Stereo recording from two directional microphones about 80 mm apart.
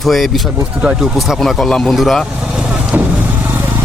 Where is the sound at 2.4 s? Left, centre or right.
Centre.